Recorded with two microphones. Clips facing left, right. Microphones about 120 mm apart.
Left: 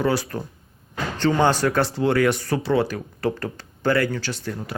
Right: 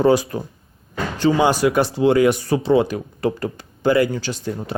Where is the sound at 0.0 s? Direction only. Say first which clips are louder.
Right 6 dB; 20° right (ahead or behind).